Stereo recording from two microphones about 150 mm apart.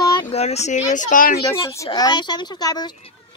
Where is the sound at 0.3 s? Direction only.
45° left (ahead or behind); by 1.4 s 65° left (ahead or behind).